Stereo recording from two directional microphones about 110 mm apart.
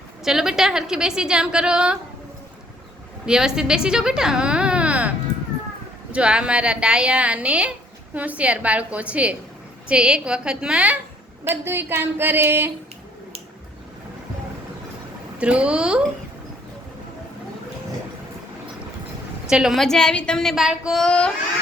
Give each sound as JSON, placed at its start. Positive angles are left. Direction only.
{"t": 0.3, "sound": "a woman's voice", "side_deg": -5}
{"t": 3.2, "sound": "a woman's voice", "side_deg": -5}
{"t": 11.4, "sound": "speech", "side_deg": -20}
{"t": 15.4, "sound": "a woman's voice", "side_deg": -10}
{"t": 19.5, "sound": "a woman's voice", "side_deg": -5}
{"t": 21.0, "sound": "carnatic music", "side_deg": 10}